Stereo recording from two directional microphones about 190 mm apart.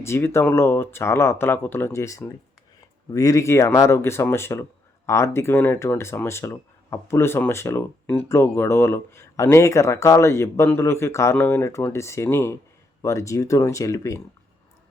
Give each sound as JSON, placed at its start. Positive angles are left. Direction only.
{"t": 0.0, "sound": "speech", "side_deg": 15}